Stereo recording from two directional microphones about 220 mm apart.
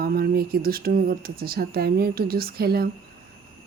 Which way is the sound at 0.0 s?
45° right (ahead or behind).